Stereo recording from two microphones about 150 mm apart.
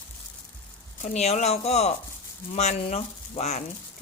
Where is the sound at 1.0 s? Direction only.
50° left (ahead or behind).